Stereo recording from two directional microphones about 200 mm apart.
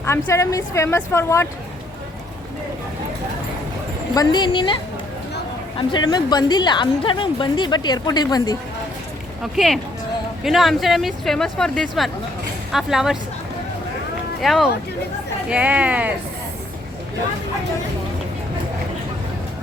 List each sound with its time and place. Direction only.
0.0 s speech: 15° left (ahead or behind)
4.1 s a woman's voice: 20° left (ahead or behind)
9.4 s speech: centre (ahead or behind)
14.4 s speech: centre (ahead or behind)